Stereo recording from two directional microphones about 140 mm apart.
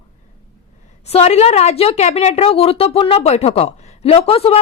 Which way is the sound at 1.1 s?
50° left (ahead or behind).